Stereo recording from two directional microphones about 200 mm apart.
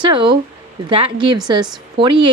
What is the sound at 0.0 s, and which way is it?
Speech, 25° right (ahead or behind).